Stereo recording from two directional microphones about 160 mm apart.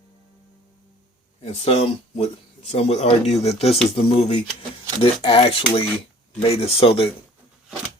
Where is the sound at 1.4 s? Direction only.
40° left (ahead or behind).